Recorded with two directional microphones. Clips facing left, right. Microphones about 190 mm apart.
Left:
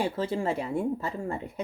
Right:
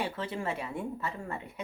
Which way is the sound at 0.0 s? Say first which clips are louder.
Left 6 dB; 30° left (ahead or behind).